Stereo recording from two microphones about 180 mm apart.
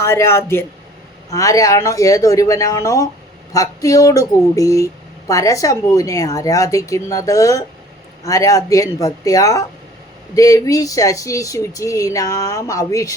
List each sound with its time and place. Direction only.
0.0 s a woman's voice: 15° left (ahead or behind)